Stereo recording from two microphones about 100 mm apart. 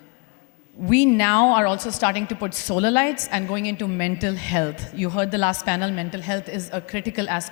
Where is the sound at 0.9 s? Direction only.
20° left (ahead or behind).